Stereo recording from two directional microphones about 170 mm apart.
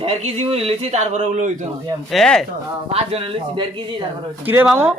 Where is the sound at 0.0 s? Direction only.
35° right (ahead or behind).